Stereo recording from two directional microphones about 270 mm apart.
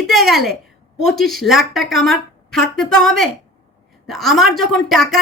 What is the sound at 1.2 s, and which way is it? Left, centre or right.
Speech, centre.